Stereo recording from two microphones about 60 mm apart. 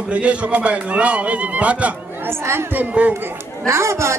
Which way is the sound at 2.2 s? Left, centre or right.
Right.